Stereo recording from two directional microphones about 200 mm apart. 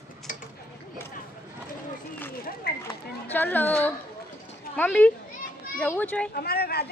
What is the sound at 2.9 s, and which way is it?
Children playing, 10° left (ahead or behind).